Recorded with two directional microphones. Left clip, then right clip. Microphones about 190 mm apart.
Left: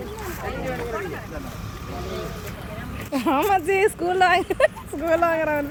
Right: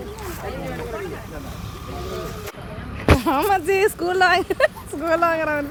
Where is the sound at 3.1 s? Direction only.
Centre (ahead or behind).